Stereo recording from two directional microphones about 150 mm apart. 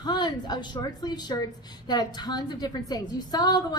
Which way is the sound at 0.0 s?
30° left (ahead or behind).